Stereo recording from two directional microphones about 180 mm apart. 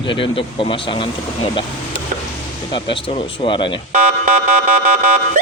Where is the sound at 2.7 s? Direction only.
25° left (ahead or behind).